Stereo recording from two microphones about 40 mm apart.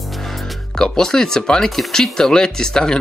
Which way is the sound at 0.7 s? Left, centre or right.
Centre.